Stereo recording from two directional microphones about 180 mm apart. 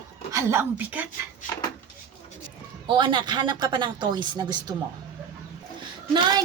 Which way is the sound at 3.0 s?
25° right (ahead or behind).